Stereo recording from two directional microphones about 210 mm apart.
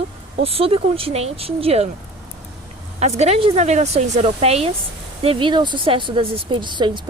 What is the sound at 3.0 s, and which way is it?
Speech, 30° right (ahead or behind).